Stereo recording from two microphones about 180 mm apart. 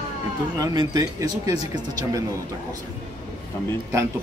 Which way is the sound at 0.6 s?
20° right (ahead or behind).